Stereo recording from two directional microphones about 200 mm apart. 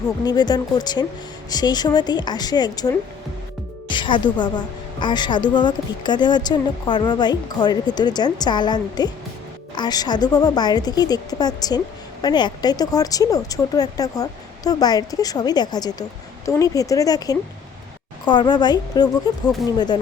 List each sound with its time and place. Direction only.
0.3 s a woman's voice: 20° left (ahead or behind)